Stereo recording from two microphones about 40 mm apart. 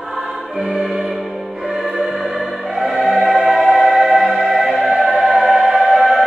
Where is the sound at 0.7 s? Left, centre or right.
Centre.